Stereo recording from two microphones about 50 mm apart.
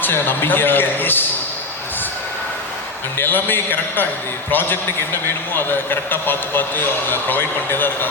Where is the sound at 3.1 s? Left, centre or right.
Left.